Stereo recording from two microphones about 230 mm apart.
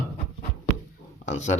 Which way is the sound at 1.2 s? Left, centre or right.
Left.